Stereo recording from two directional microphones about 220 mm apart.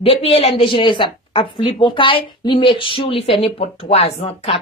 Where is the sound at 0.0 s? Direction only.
25° left (ahead or behind).